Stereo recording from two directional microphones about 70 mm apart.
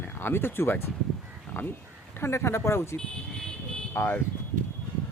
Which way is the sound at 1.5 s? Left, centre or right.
Left.